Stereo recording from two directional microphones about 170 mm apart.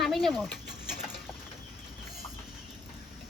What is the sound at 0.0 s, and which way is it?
Speech, centre (ahead or behind).